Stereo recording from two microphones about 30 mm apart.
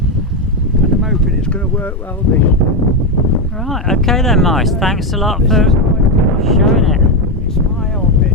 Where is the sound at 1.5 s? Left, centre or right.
Left.